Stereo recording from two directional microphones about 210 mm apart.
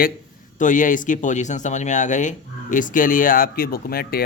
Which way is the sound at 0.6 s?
40° left (ahead or behind).